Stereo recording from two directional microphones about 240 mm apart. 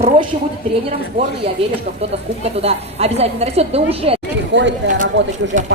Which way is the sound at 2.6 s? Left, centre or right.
Right.